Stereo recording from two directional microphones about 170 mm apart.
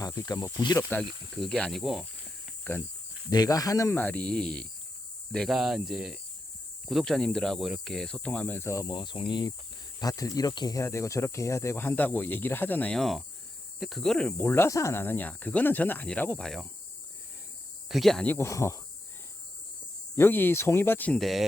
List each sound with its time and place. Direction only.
0.0 s speech: 20° left (ahead or behind)
1.4 s speech: 5° left (ahead or behind)
2.7 s speech: 10° left (ahead or behind)
3.2 s speech: 20° left (ahead or behind); by 16.6 s 5° left (ahead or behind)
17.8 s speech: centre (ahead or behind); by 18.8 s 15° left (ahead or behind)
20.1 s speech: 10° left (ahead or behind)